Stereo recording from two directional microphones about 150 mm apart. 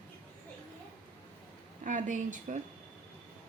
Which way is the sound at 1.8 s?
60° right (ahead or behind).